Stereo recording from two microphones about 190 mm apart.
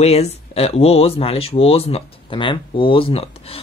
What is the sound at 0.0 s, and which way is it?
Speech, 35° left (ahead or behind).